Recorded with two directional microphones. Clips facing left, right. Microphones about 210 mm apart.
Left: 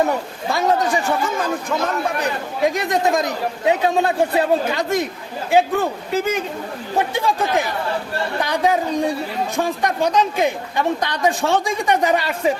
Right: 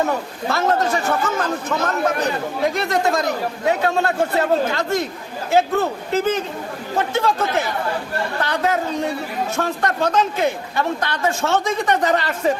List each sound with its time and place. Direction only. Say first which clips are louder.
0.5 s a man's voice: left 1 dB; 15° left (ahead or behind)
2.6 s a man's voice: left 2 dB; 15° left (ahead or behind)